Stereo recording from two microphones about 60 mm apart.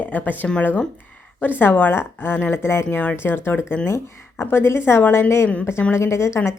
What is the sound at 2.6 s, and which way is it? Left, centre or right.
A woman's voice, left.